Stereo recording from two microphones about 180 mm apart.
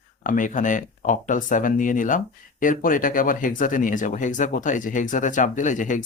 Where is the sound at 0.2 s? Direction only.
45° left (ahead or behind).